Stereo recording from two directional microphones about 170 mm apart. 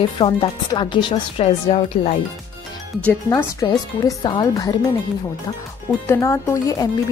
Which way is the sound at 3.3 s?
20° left (ahead or behind).